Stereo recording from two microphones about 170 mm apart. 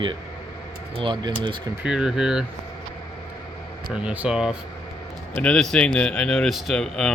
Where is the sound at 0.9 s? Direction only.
25° right (ahead or behind).